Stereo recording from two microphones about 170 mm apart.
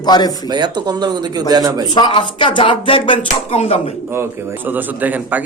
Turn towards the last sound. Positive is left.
turn(degrees=-10)  # may be behind; listen again after turning